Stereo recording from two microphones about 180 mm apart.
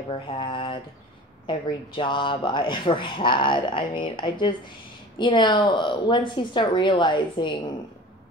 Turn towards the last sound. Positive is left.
turn(degrees=25)  # may be behind; listen again after turning